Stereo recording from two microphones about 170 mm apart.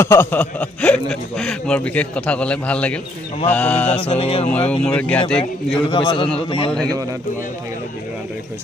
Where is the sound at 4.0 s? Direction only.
35° left (ahead or behind).